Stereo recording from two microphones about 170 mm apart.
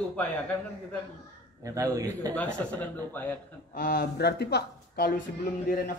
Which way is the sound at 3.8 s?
70° left (ahead or behind).